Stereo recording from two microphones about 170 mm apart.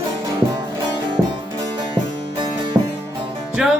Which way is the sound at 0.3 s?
25° right (ahead or behind).